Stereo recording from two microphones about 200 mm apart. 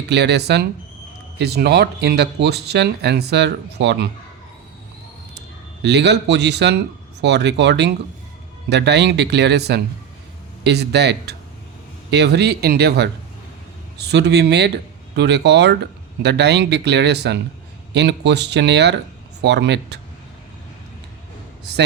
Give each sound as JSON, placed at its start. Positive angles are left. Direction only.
{"t": 0.1, "sound": "speech", "side_deg": -60}
{"t": 5.8, "sound": "speech", "side_deg": -60}
{"t": 21.6, "sound": "a man's voice", "side_deg": -55}